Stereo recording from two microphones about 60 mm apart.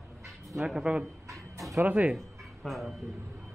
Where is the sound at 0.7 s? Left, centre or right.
Centre.